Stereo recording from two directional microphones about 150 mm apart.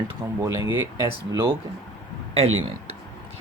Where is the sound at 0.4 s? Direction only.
20° right (ahead or behind).